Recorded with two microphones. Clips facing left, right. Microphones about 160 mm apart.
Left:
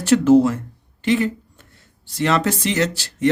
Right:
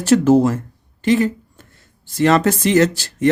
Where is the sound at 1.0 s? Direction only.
40° right (ahead or behind).